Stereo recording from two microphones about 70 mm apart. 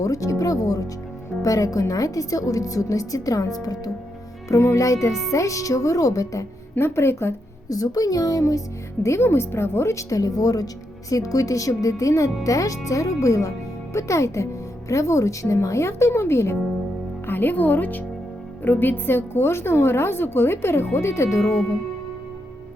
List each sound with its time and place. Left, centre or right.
0.0 s a woman's voice: left
4.4 s speech: left
6.7 s a woman's voice: left
7.7 s a woman's voice: left
9.0 s speech: left
17.2 s a woman's voice: left
21.3 s speech: centre